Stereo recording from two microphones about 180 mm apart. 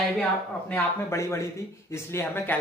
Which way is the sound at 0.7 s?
15° left (ahead or behind).